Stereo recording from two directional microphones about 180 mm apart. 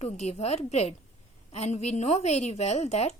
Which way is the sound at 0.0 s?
35° left (ahead or behind).